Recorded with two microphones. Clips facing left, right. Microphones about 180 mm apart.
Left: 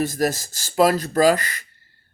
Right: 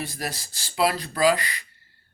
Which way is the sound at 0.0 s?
45° left (ahead or behind).